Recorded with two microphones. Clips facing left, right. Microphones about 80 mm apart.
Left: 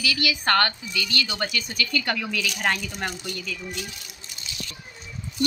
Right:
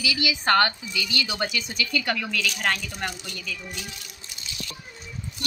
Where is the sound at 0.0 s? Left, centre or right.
Centre.